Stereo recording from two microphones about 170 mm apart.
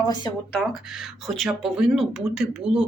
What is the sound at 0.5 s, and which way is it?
Speech, centre (ahead or behind).